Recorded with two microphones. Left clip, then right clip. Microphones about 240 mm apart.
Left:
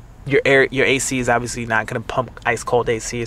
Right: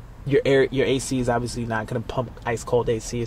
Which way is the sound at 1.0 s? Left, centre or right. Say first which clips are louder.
Left 4 dB; centre.